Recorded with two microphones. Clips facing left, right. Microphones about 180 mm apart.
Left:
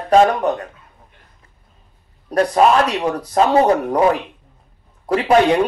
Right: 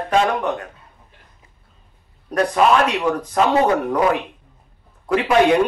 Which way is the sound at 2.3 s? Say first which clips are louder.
Left 2 dB; 35° left (ahead or behind).